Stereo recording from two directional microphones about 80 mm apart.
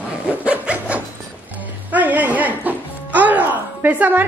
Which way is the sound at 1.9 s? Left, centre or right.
Right.